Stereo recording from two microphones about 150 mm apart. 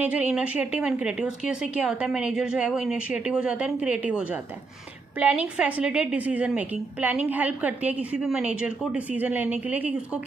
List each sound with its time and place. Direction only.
0.0 s a woman's voice: 10° right (ahead or behind)